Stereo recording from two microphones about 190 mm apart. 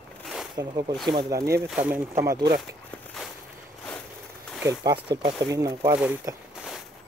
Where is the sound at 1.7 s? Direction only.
10° right (ahead or behind).